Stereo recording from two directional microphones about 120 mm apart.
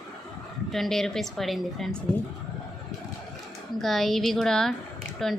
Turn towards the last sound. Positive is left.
turn(degrees=0)  # may be behind; listen again after turning